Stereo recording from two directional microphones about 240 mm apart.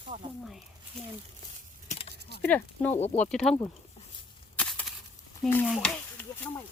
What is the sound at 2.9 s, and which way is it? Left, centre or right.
Speech, left.